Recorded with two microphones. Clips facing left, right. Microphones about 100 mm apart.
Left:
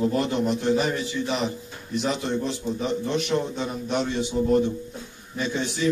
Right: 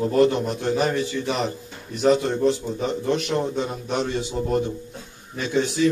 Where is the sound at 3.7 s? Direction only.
35° right (ahead or behind).